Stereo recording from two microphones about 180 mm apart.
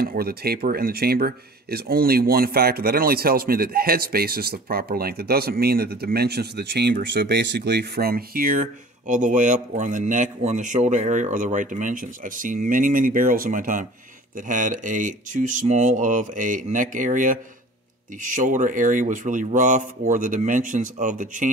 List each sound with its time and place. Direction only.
0.0 s speech: 60° right (ahead or behind)